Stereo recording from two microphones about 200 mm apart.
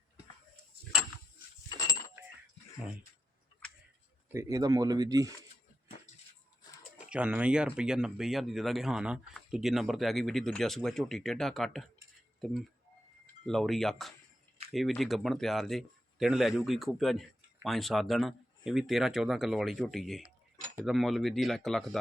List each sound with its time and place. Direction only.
1.7 s goat: 20° left (ahead or behind)
4.3 s speech: 15° right (ahead or behind)
7.1 s speech: 5° right (ahead or behind)
13.4 s speech: centre (ahead or behind)